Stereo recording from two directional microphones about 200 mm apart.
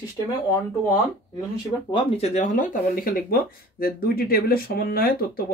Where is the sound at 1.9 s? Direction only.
30° left (ahead or behind).